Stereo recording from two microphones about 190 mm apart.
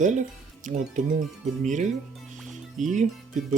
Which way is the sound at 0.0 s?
40° right (ahead or behind).